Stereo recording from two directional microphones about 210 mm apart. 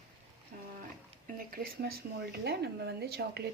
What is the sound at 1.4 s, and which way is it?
Speech, 45° right (ahead or behind).